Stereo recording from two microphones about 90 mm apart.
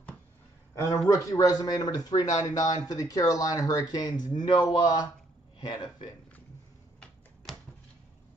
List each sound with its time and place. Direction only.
0.7 s speech: 40° left (ahead or behind); by 6.0 s 65° left (ahead or behind)